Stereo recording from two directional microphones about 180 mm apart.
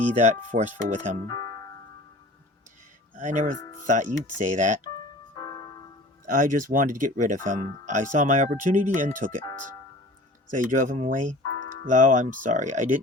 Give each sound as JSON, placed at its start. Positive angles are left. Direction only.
{"t": 0.2, "sound": "speech", "side_deg": -40}
{"t": 1.3, "sound": "music", "side_deg": 20}
{"t": 3.2, "sound": "speech", "side_deg": -45}
{"t": 5.3, "sound": "music", "side_deg": 20}
{"t": 6.2, "sound": "speech", "side_deg": -45}
{"t": 10.5, "sound": "speech", "side_deg": -45}